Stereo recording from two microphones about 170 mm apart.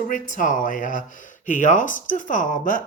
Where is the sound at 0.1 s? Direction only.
50° left (ahead or behind).